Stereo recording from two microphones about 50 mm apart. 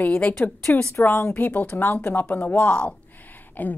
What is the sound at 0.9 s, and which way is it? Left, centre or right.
Speech, left.